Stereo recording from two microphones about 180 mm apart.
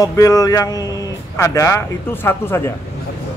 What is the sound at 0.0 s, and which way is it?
A man's voice, 20° left (ahead or behind).